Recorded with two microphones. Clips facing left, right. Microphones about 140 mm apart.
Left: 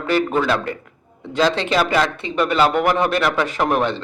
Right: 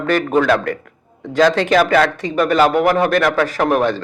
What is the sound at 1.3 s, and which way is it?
Speech, 50° right (ahead or behind).